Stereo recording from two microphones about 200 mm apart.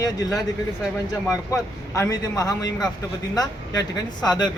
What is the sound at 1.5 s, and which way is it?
A woman's voice, 15° left (ahead or behind).